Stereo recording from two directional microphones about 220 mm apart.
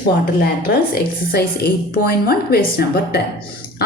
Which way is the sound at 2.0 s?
45° left (ahead or behind).